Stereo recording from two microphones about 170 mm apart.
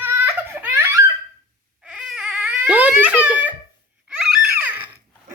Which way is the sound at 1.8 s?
5° right (ahead or behind).